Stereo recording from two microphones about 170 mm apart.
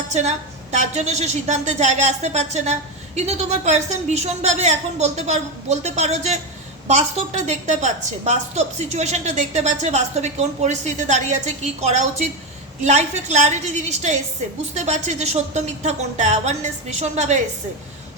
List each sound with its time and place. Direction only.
0.1 s a woman's voice: 45° right (ahead or behind)